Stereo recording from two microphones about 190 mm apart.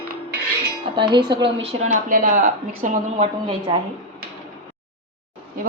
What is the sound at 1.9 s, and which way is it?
A woman's voice, 40° right (ahead or behind).